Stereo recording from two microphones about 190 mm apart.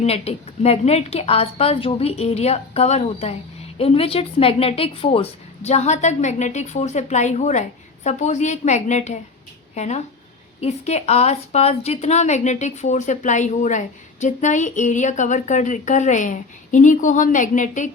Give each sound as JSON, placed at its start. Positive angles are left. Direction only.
{"t": 0.0, "sound": "a woman's voice", "side_deg": 35}